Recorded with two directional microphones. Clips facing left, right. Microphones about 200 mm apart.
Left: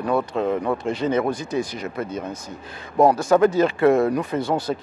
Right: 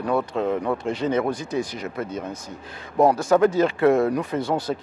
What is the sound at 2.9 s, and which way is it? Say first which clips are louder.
Speech: left 1 dB; 30° left (ahead or behind).